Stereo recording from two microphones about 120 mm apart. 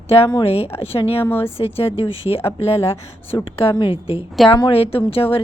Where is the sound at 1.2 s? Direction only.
20° left (ahead or behind).